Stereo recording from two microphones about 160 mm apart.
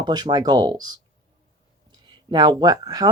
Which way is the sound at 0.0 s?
25° right (ahead or behind).